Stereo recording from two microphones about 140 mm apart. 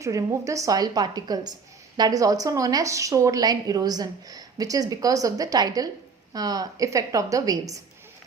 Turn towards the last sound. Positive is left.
turn(degrees=-25)  # may be behind; listen again after turning